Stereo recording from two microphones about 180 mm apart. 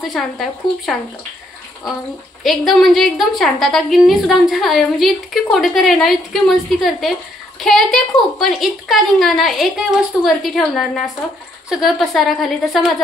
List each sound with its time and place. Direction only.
0.0 s a woman's voice: centre (ahead or behind)
2.4 s a woman's voice: centre (ahead or behind)